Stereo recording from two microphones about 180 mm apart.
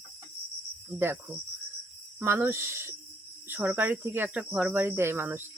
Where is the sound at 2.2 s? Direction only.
15° right (ahead or behind).